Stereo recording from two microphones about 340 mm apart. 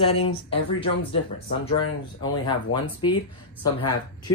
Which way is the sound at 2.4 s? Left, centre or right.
Centre.